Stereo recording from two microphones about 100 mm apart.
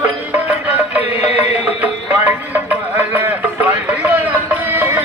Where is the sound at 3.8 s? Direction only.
15° right (ahead or behind).